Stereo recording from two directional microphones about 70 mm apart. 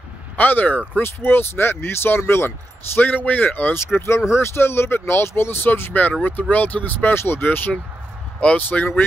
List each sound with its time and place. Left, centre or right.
0.4 s speech: left
3.1 s speech: left
4.0 s speech: left